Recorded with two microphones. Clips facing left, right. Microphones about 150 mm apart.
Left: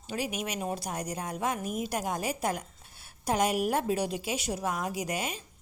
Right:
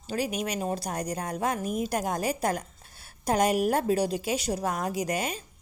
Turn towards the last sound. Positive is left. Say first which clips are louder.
# right 4 dB
turn(degrees=-40)  # may be behind; listen again after turning